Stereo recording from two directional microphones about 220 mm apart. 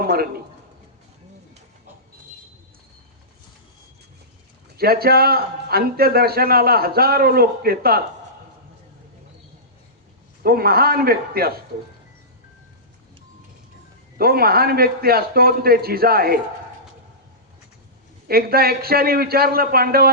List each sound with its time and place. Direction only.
0.0 s a man's voice: 45° right (ahead or behind)
4.8 s a man's voice: 45° right (ahead or behind)
10.4 s a man's voice: 45° right (ahead or behind)
14.2 s a man's voice: 45° right (ahead or behind)
18.3 s a man's voice: 45° right (ahead or behind)